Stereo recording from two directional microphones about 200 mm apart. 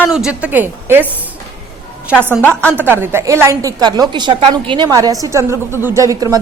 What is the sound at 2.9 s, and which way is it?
A woman's voice, 10° right (ahead or behind).